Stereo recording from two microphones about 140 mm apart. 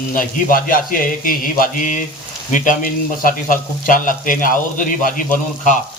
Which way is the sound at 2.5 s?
70° left (ahead or behind).